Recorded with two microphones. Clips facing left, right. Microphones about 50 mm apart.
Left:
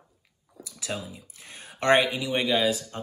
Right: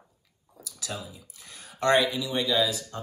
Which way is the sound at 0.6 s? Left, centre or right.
Left.